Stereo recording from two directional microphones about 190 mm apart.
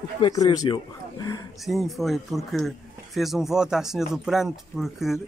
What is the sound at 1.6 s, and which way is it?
Speech, centre (ahead or behind).